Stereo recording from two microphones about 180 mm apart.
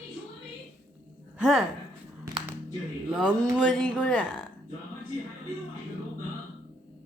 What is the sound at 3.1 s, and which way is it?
Speech, 5° left (ahead or behind).